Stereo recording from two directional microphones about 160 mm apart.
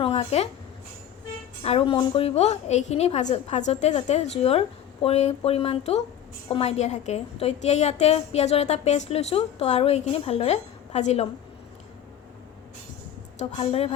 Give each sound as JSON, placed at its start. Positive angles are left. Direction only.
{"t": 0.0, "sound": "speech", "side_deg": 40}
{"t": 1.6, "sound": "a woman's voice", "side_deg": 35}
{"t": 13.4, "sound": "speech", "side_deg": 40}